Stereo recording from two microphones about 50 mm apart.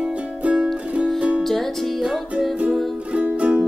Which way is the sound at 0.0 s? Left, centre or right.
Right.